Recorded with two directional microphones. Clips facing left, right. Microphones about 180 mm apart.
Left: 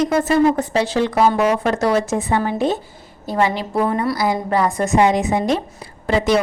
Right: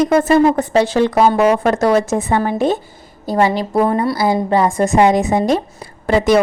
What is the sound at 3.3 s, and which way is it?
Speech, 40° right (ahead or behind).